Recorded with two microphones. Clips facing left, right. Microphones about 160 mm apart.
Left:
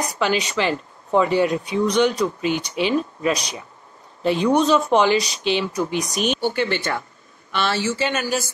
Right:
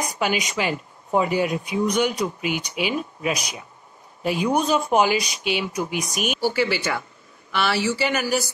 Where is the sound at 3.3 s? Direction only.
35° left (ahead or behind).